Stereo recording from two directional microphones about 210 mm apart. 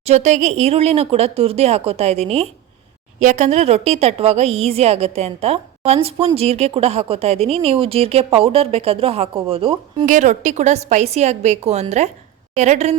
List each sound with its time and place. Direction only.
0.0 s a woman's voice: 30° right (ahead or behind)
10.1 s a woman's voice: 35° right (ahead or behind)